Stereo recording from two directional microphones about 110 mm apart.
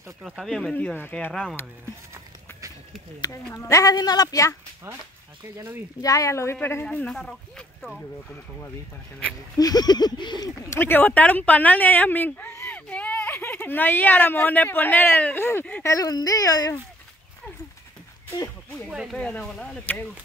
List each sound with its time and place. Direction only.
0.2 s speech: centre (ahead or behind)
0.7 s speech: 15° left (ahead or behind)
1.3 s speech: 5° left (ahead or behind)
3.5 s speech: 30° left (ahead or behind)
5.9 s speech: 30° left (ahead or behind); by 8.0 s 5° left (ahead or behind)
9.6 s speech: 35° left (ahead or behind)
10.8 s speech: 20° left (ahead or behind)
15.8 s speech: 30° left (ahead or behind)
18.9 s speech: 5° right (ahead or behind)
19.1 s speech: 10° left (ahead or behind)